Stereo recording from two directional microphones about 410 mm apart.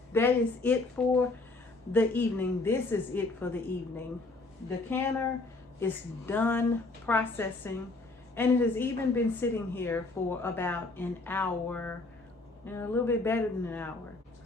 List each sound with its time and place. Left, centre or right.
0.1 s speech: centre
4.9 s speech: centre